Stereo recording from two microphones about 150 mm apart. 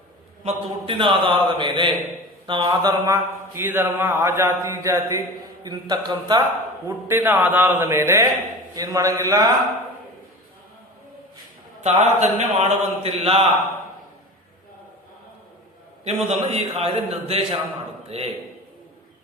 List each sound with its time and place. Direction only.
0.4 s a man's voice: 35° right (ahead or behind)
2.5 s a sound: 30° right (ahead or behind)
5.6 s a man's voice: 30° right (ahead or behind)
6.8 s a sound: 15° right (ahead or behind)
8.7 s a man's voice: 25° right (ahead or behind)
11.8 s a man's voice: 50° right (ahead or behind)
16.0 s a man's voice: 45° right (ahead or behind)